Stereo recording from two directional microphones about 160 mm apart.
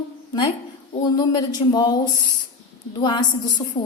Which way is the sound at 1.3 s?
25° left (ahead or behind).